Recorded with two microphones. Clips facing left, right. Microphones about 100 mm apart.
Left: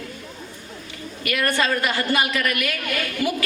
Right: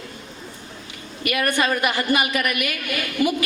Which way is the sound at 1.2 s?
20° right (ahead or behind).